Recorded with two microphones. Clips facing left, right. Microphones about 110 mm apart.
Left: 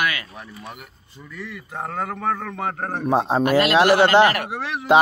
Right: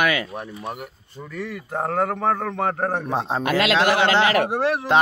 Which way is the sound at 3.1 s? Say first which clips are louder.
Left 4 dB; 10° left (ahead or behind).